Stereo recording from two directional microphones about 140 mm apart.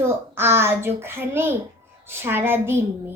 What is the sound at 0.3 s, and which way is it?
A child's voice, 15° right (ahead or behind).